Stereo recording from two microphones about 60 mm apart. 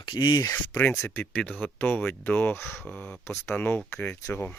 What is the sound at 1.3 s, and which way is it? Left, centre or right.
Speech, left.